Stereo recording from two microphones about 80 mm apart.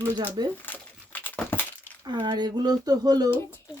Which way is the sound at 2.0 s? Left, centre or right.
Right.